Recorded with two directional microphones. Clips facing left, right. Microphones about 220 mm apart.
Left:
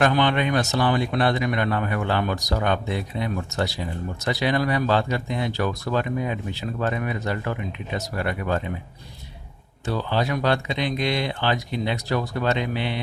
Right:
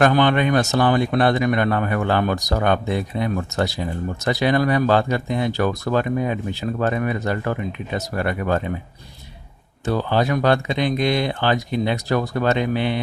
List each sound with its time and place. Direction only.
0.0 s speech: 50° right (ahead or behind)
9.8 s speech: 50° right (ahead or behind)